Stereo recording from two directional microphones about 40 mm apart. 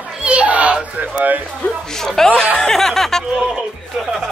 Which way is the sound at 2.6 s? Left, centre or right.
Centre.